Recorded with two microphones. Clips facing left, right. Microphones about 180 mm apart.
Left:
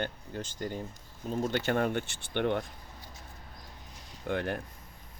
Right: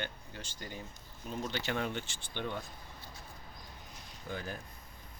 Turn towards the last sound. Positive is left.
turn(degrees=70)  # may be behind; listen again after turning